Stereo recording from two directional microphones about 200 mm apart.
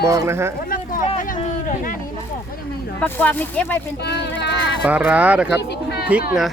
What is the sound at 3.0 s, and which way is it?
Speech, 10° left (ahead or behind).